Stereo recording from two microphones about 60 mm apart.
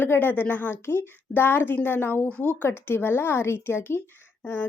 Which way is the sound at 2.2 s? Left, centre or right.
Left.